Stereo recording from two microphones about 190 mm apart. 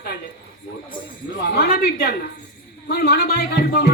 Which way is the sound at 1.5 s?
50° left (ahead or behind).